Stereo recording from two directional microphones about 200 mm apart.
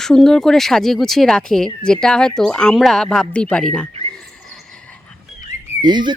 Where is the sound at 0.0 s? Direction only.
Centre (ahead or behind).